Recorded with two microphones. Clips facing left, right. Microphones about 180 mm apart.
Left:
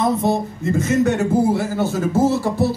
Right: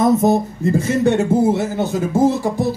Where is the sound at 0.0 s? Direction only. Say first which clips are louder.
Right 4 dB; 45° right (ahead or behind).